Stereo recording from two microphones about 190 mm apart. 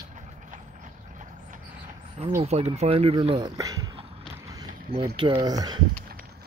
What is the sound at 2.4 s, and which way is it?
Speech, 35° right (ahead or behind).